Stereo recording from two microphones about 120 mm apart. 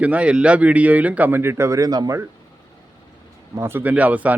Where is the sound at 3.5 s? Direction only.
20° right (ahead or behind).